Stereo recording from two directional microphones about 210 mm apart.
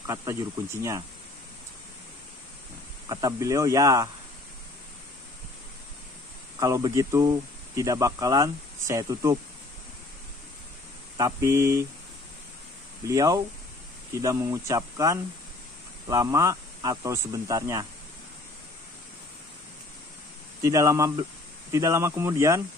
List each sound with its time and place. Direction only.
0.0 s speech: 15° right (ahead or behind)
3.1 s speech: 15° right (ahead or behind)
6.6 s speech: 15° right (ahead or behind)
11.1 s speech: 15° right (ahead or behind)
13.0 s speech: 15° right (ahead or behind)
20.6 s speech: 15° right (ahead or behind)